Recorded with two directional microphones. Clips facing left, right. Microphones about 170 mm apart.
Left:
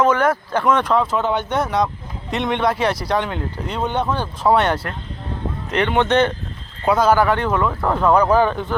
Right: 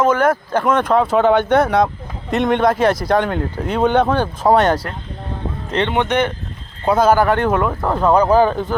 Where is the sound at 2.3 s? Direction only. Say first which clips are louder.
Right 5 dB; 45° right (ahead or behind).